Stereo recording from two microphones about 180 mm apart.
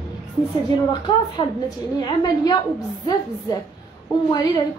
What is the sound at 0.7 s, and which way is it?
A woman's voice, 25° left (ahead or behind).